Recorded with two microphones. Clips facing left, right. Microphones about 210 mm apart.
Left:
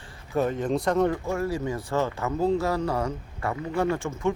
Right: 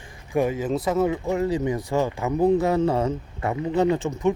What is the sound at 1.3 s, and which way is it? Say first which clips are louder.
Speech: right 4 dB; 20° right (ahead or behind).